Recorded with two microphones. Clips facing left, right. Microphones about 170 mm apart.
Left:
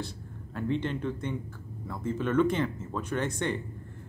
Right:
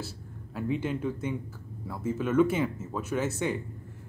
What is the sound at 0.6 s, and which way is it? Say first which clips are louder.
Speech: even; 5° right (ahead or behind).